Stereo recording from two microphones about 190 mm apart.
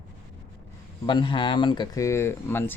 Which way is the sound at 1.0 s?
25° left (ahead or behind).